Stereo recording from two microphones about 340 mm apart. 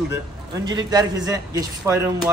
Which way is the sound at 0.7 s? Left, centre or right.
Centre.